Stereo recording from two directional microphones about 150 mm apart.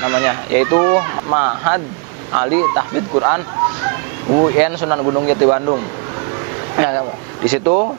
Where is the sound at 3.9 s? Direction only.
30° right (ahead or behind).